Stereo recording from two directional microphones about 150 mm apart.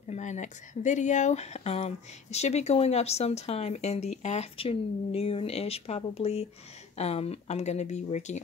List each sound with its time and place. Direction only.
0.1 s speech: 55° left (ahead or behind)